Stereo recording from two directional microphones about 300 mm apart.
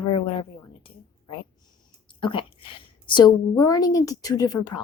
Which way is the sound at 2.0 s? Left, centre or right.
Centre.